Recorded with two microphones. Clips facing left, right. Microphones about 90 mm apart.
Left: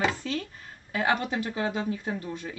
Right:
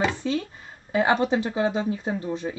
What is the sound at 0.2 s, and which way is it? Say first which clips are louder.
Speech: right 6 dB; 20° right (ahead or behind).